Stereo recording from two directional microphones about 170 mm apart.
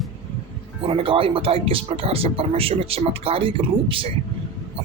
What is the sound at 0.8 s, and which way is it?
Speech, 30° right (ahead or behind).